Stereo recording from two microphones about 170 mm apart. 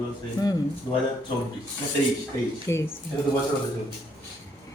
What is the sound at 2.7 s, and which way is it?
Speech, 15° left (ahead or behind).